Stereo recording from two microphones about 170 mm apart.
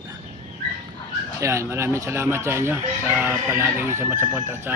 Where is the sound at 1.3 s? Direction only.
15° right (ahead or behind).